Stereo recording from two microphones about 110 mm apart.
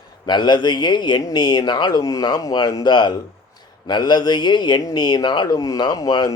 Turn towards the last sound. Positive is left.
turn(degrees=35)  # may be behind; listen again after turning